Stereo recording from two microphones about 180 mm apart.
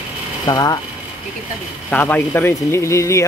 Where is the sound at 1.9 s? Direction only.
10° left (ahead or behind).